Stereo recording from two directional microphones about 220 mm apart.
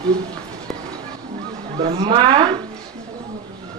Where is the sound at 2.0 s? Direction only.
25° right (ahead or behind).